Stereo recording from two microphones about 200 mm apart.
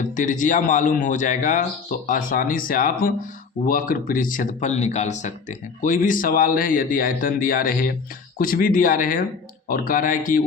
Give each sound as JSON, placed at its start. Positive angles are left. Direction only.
{"t": 0.0, "sound": "speech", "side_deg": 40}